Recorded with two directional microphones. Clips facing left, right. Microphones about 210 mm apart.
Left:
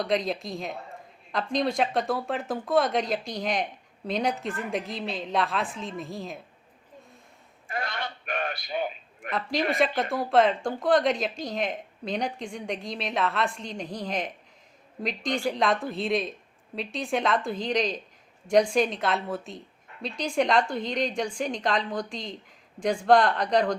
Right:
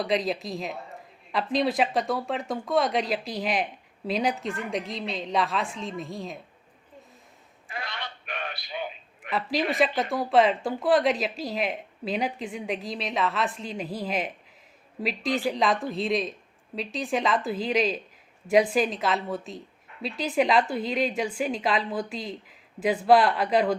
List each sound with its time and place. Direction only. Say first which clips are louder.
0.0 s a woman's voice: right 1 dB; centre (ahead or behind)
7.7 s a sound: left 4 dB; 45° left (ahead or behind)
9.3 s a woman's voice: even; 5° right (ahead or behind)